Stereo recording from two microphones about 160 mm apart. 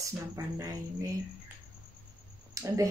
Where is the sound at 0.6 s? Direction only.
20° right (ahead or behind).